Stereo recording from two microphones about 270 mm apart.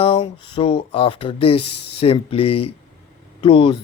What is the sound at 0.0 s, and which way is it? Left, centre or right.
Speech, centre.